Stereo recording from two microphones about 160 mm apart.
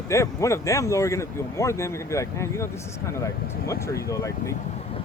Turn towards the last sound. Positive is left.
turn(degrees=20)  # may be behind; listen again after turning